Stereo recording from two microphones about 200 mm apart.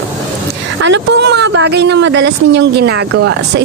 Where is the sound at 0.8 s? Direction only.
65° right (ahead or behind).